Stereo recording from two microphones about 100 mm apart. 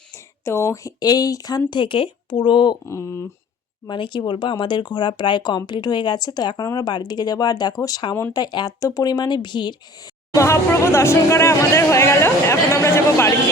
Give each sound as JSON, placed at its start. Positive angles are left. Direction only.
{"t": 0.1, "sound": "speech", "side_deg": 30}
{"t": 1.7, "sound": "speech", "side_deg": 55}
{"t": 2.8, "sound": "speech", "side_deg": 25}
{"t": 3.8, "sound": "speech", "side_deg": 55}
{"t": 10.3, "sound": "speech", "side_deg": 30}